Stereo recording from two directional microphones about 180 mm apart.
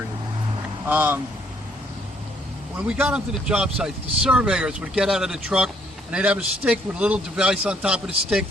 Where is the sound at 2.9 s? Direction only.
10° right (ahead or behind).